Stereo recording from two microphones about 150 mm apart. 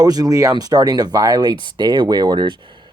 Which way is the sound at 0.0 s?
25° right (ahead or behind).